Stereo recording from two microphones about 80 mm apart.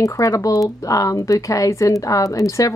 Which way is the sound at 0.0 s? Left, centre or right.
Left.